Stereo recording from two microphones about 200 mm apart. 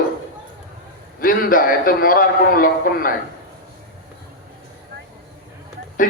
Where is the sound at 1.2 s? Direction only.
45° left (ahead or behind).